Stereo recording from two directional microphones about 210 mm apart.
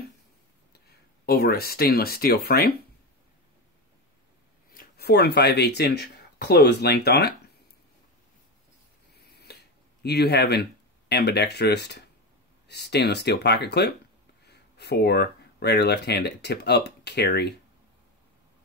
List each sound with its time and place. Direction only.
0.7 s speech: 50° left (ahead or behind)
4.7 s speech: 50° left (ahead or behind)
9.1 s a sound: 50° left (ahead or behind)
10.0 s speech: 50° left (ahead or behind)